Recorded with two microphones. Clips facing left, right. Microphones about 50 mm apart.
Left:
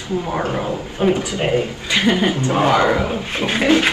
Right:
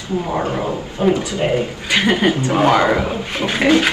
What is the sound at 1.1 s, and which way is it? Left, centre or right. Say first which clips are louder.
Speech: right 1 dB; left.